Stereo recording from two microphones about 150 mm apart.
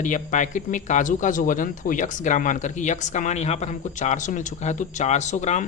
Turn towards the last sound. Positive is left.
turn(degrees=50)  # may be behind; listen again after turning